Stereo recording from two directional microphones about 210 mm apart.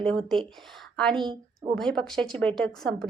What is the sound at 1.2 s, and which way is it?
Speech, 20° right (ahead or behind).